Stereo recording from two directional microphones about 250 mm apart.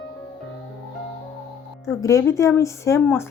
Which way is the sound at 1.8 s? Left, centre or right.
Centre.